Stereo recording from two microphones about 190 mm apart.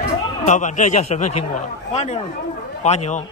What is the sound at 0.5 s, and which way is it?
Speech, 40° left (ahead or behind).